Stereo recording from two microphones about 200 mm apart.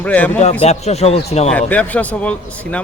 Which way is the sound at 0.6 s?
30° left (ahead or behind).